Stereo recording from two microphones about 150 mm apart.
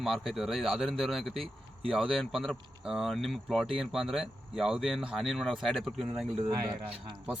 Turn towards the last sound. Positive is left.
turn(degrees=-25)  # may be behind; listen again after turning